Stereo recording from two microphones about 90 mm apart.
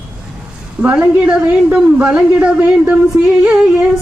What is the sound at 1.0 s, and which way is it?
A woman's voice, 10° right (ahead or behind).